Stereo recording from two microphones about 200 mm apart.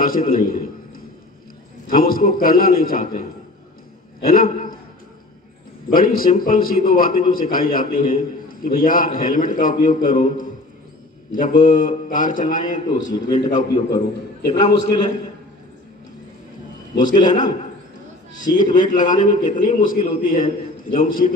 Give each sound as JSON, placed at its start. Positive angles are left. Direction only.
{"t": 0.0, "sound": "a man's voice", "side_deg": 45}
{"t": 1.9, "sound": "a man's voice", "side_deg": 45}
{"t": 5.9, "sound": "a man's voice", "side_deg": 45}
{"t": 13.0, "sound": "a man's voice", "side_deg": 25}
{"t": 13.5, "sound": "a man's voice", "side_deg": 35}
{"t": 13.9, "sound": "a man's voice", "side_deg": 20}
{"t": 17.2, "sound": "a man's voice", "side_deg": 40}